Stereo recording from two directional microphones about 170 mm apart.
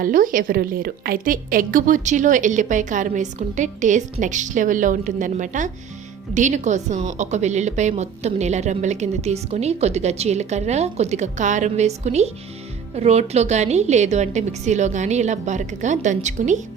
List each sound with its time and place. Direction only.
0.0 s a woman's voice: 55° right (ahead or behind)